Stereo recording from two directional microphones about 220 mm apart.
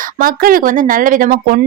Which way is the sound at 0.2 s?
40° right (ahead or behind).